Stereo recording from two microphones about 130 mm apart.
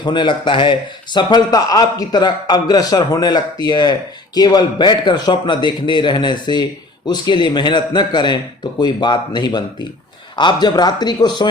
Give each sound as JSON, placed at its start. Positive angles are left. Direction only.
{"t": 0.0, "sound": "speech", "side_deg": 35}